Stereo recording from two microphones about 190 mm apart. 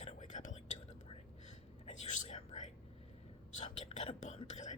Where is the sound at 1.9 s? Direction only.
40° left (ahead or behind).